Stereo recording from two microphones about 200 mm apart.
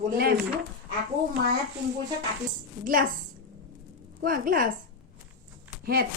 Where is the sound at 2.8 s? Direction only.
45° right (ahead or behind).